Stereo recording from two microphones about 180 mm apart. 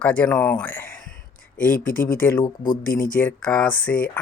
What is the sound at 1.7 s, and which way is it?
Speech, 50° left (ahead or behind).